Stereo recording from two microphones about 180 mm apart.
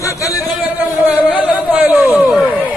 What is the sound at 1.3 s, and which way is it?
Speech, 10° right (ahead or behind).